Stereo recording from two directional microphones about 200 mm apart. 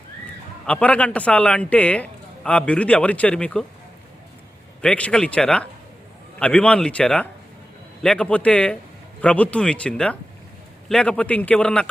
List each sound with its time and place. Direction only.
0.6 s a man's voice: 5° left (ahead or behind)
4.8 s a man's voice: 5° left (ahead or behind)